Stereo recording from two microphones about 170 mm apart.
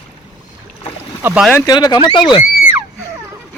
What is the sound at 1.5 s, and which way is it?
Speech, 25° left (ahead or behind).